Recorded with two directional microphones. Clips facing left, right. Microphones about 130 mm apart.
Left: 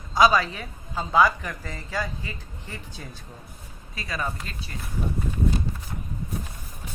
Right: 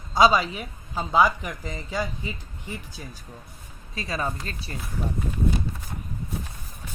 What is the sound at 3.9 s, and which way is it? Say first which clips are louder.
Speech: right 2 dB; 30° right (ahead or behind).